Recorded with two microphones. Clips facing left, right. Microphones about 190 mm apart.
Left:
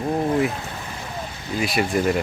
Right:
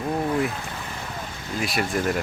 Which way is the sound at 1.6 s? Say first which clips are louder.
Left 4 dB; centre (ahead or behind).